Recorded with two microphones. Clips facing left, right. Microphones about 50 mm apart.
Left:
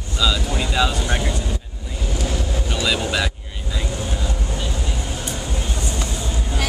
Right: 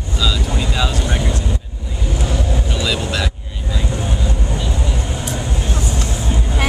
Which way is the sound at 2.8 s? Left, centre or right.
Centre.